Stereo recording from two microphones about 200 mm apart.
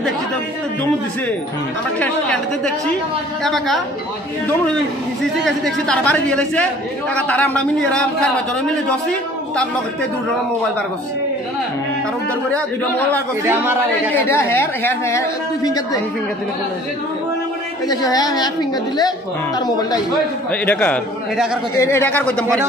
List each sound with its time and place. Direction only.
2.0 s speech: 5° left (ahead or behind)
5.4 s speech: 5° left (ahead or behind)
13.5 s a man's voice: 10° right (ahead or behind)
14.1 s speech: 10° left (ahead or behind)
17.8 s a woman's voice: 20° left (ahead or behind)
20.6 s speech: 5° left (ahead or behind)